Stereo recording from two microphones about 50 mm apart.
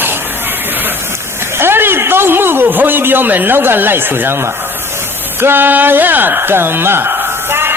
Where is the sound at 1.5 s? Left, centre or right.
Right.